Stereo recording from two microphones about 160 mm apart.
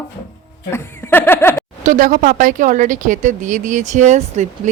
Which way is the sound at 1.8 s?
55° right (ahead or behind).